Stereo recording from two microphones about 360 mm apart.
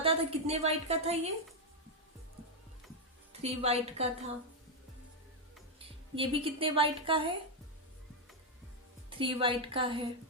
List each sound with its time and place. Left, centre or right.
0.0 s a woman's voice: centre
3.4 s a woman's voice: centre
6.1 s a woman's voice: centre
9.0 s a woman's voice: centre